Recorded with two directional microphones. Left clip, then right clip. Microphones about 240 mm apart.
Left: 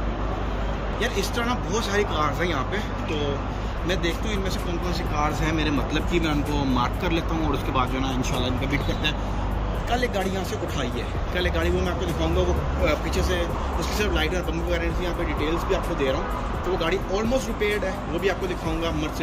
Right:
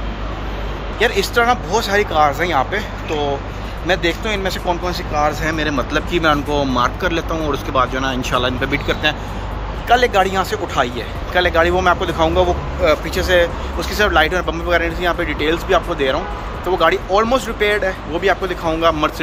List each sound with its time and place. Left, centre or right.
0.9 s speech: centre
9.8 s speech: centre